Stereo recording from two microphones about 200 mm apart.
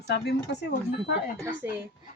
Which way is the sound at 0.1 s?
60° left (ahead or behind).